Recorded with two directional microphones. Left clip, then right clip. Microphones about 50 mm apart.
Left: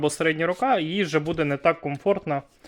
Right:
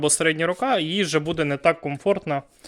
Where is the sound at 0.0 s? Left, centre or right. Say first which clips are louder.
Right 2 dB; right.